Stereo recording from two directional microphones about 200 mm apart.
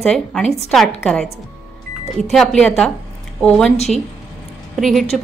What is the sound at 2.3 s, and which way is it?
A woman's voice, centre (ahead or behind).